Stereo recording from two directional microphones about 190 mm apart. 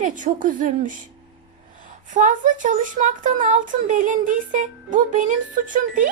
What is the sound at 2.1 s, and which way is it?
Speech, 45° right (ahead or behind).